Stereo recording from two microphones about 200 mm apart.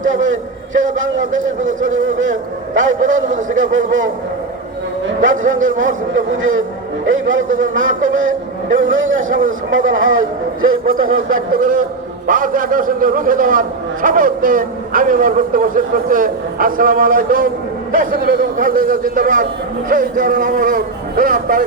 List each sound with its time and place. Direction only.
0.0 s a man's voice: 75° right (ahead or behind)
5.0 s a man's voice: 75° right (ahead or behind)
11.3 s a man's voice: 45° right (ahead or behind)